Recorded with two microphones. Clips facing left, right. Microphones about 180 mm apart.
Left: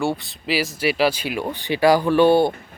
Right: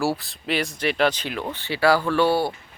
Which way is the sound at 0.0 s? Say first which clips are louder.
Left 1 dB; centre (ahead or behind).